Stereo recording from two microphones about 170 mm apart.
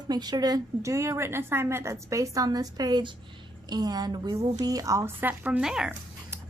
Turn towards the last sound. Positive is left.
turn(degrees=-5)  # may be behind; listen again after turning